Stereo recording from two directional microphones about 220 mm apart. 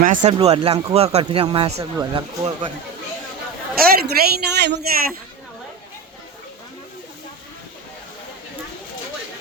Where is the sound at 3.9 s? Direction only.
45° right (ahead or behind).